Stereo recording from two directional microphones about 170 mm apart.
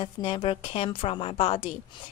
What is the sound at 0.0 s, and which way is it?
A woman's voice, 30° left (ahead or behind).